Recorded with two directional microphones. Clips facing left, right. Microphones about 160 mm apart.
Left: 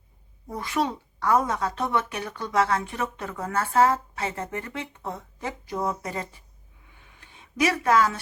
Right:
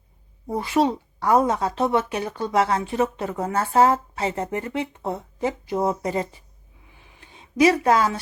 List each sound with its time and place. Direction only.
0.4 s speech: 30° right (ahead or behind)
7.3 s a woman's voice: 25° right (ahead or behind)